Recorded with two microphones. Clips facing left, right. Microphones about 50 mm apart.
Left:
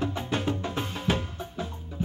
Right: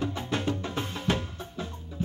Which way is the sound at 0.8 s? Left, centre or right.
Left.